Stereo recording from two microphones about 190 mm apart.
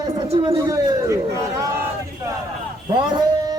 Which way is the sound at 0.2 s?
25° right (ahead or behind).